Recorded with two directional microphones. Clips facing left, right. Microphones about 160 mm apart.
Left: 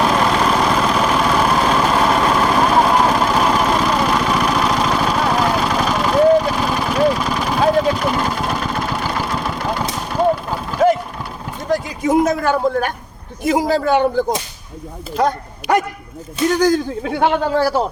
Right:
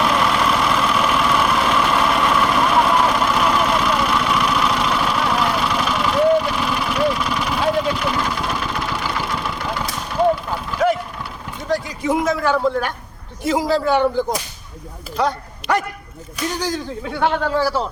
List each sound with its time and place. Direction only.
0.0 s vehicle: 40° left (ahead or behind)
11.7 s a sound: 45° left (ahead or behind)
13.5 s a man's voice: 50° left (ahead or behind)
16.6 s a man's voice: 50° left (ahead or behind)
17.1 s speech: 20° left (ahead or behind)
17.6 s a man's voice: 50° left (ahead or behind)